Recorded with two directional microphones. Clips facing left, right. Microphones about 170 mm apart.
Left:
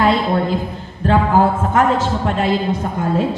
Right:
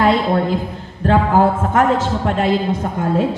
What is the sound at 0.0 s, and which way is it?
A man's voice, 50° right (ahead or behind).